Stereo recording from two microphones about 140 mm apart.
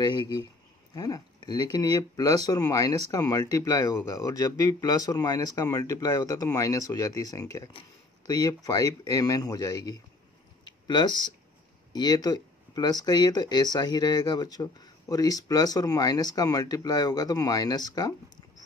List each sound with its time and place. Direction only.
0.0 s speech: 30° left (ahead or behind)
10.6 s a sound: 30° left (ahead or behind)
11.9 s speech: 30° left (ahead or behind)